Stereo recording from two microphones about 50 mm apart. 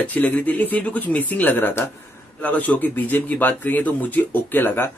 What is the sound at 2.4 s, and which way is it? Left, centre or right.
Speech, left.